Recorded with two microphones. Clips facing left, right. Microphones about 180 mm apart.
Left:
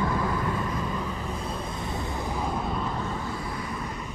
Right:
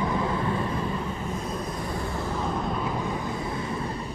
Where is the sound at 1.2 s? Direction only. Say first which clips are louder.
Right 1 dB; 35° left (ahead or behind).